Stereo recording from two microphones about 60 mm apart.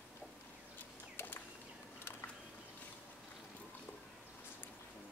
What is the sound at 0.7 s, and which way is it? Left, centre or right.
Bird flight, left.